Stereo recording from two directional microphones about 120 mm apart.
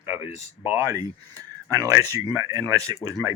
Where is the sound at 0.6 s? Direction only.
20° right (ahead or behind).